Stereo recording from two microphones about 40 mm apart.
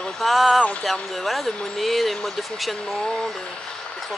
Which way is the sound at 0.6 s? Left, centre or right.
Left.